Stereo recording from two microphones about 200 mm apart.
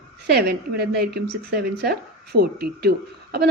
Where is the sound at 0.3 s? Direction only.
50° right (ahead or behind).